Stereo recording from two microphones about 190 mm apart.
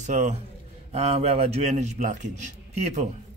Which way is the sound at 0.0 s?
35° right (ahead or behind).